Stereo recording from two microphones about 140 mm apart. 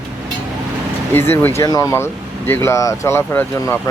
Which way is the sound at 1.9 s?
15° left (ahead or behind).